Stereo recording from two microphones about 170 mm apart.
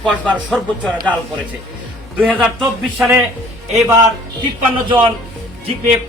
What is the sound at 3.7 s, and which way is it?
Speech, 20° right (ahead or behind).